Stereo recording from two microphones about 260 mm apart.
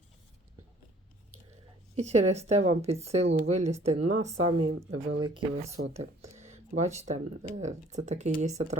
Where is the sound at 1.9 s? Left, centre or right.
Right.